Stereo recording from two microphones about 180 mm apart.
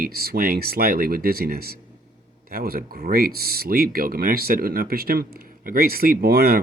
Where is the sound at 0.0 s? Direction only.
60° right (ahead or behind).